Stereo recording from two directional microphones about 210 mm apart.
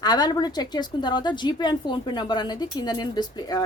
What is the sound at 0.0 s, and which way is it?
A woman's voice, 20° left (ahead or behind).